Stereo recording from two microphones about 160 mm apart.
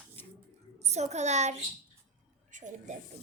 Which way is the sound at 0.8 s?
45° right (ahead or behind).